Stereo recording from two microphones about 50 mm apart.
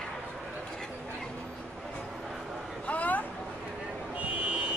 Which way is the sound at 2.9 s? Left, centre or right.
Left.